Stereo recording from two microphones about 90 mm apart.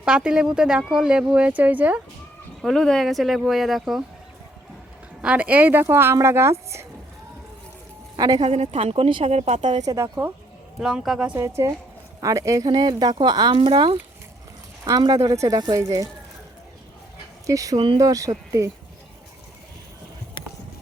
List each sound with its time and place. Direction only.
0.0 s speech: 10° right (ahead or behind)
2.6 s speech: 5° left (ahead or behind)
5.2 s speech: 15° right (ahead or behind); by 6.8 s 30° right (ahead or behind)
8.1 s speech: 55° right (ahead or behind)
8.8 s a woman's voice: 90° right
9.8 s speech: 40° right (ahead or behind)
10.8 s speech: 5° right (ahead or behind)
11.3 s speech: 35° right (ahead or behind)
12.6 s speech: 50° right (ahead or behind)
14.8 s speech: 45° right (ahead or behind)
17.4 s speech: 40° right (ahead or behind)